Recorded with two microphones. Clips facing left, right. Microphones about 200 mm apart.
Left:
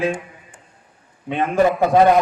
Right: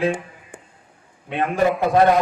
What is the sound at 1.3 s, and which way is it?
Speech, centre (ahead or behind).